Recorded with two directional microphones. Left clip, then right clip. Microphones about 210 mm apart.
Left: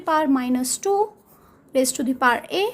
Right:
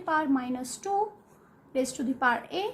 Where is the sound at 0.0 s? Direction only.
50° left (ahead or behind).